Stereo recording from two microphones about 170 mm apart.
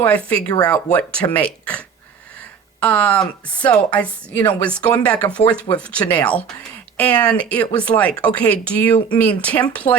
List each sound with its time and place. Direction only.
0.0 s speech: 10° left (ahead or behind)
0.4 s speech: 25° left (ahead or behind)
0.9 s speech: 10° left (ahead or behind)
2.8 s speech: 10° left (ahead or behind)